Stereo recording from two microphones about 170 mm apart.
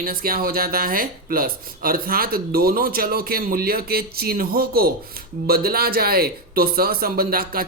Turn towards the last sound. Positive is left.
turn(degrees=-60)  # may be behind; listen again after turning